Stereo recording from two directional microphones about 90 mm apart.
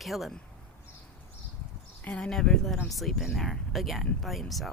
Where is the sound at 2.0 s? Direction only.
10° left (ahead or behind).